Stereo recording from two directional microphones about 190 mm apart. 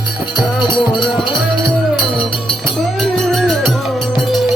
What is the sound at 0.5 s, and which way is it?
Music, 25° left (ahead or behind).